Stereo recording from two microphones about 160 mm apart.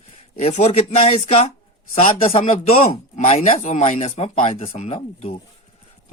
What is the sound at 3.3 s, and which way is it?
Speech, 40° left (ahead or behind).